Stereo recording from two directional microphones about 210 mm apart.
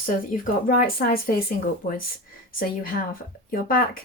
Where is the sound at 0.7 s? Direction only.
45° left (ahead or behind).